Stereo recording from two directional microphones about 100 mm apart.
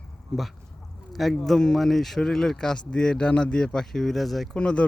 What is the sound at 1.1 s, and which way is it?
Speech, centre (ahead or behind).